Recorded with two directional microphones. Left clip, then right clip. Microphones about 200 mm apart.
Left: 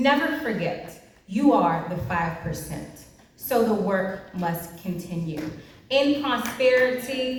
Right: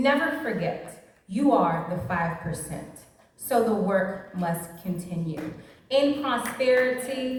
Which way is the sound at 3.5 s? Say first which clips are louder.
Left 1 dB; 60° right (ahead or behind).